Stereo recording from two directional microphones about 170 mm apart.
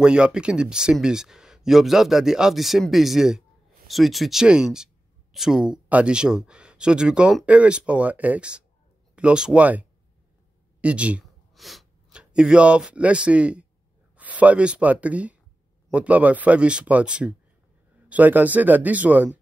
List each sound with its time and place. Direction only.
0.0 s speech: 5° right (ahead or behind)